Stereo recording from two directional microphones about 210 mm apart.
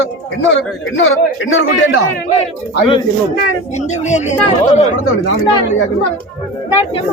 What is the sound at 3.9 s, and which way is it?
Speech, 35° left (ahead or behind).